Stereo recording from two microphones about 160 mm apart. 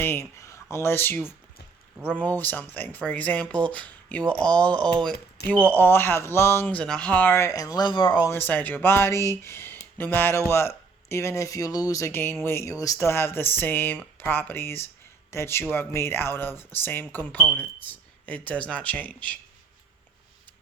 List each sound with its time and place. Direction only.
0.0 s speech: 15° left (ahead or behind)
8.3 s speech: 10° left (ahead or behind)